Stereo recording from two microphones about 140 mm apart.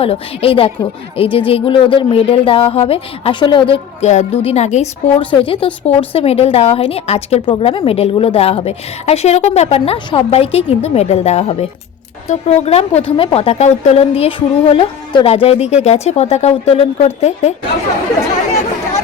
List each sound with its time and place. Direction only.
0.0 s speech: 45° left (ahead or behind)
4.0 s a woman's voice: 55° left (ahead or behind)
5.2 s a woman's voice: 40° left (ahead or behind)
7.4 s a woman's voice: 40° left (ahead or behind)